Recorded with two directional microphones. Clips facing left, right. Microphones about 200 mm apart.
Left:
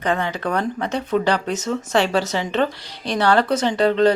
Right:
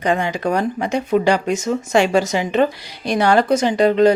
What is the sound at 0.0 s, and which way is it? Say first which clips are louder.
A woman's voice: right 3 dB; 15° right (ahead or behind).